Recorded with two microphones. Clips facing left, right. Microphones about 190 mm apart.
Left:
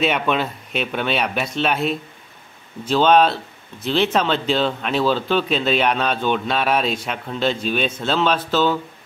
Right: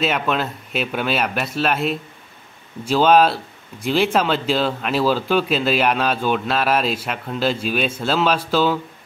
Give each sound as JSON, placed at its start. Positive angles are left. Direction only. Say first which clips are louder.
{"t": 0.0, "sound": "speech", "louder": "left 1 dB", "side_deg": 0}